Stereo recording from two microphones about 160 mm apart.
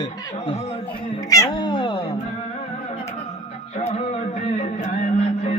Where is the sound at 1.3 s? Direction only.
25° left (ahead or behind).